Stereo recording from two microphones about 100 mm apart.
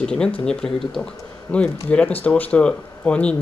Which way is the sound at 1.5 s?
35° left (ahead or behind).